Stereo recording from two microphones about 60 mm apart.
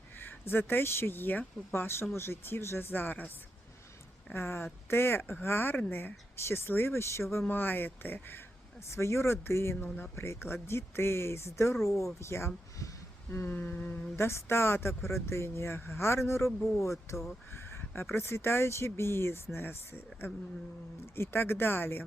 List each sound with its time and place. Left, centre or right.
0.2 s speech: left
1.7 s speech: left
4.4 s speech: left
7.4 s speech: left
8.9 s speech: left
13.5 s speech: left
14.2 s speech: left
17.5 s speech: left